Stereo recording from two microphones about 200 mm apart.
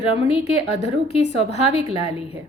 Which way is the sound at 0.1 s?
30° left (ahead or behind).